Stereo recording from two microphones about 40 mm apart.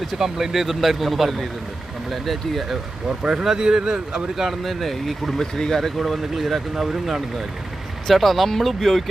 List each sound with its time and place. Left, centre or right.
0.0 s speech: centre
3.1 s speech: centre
4.4 s speech: centre
5.4 s speech: centre
6.0 s speech: centre
8.0 s speech: centre